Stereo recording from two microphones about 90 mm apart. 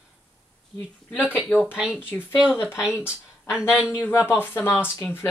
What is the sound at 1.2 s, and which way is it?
Speech, 15° right (ahead or behind).